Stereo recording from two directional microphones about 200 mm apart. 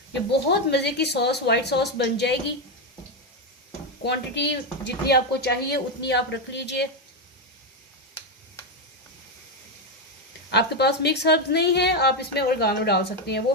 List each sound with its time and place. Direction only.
0.3 s a woman's voice: 55° left (ahead or behind)
4.0 s a woman's voice: 55° left (ahead or behind)
10.5 s a woman's voice: 55° left (ahead or behind)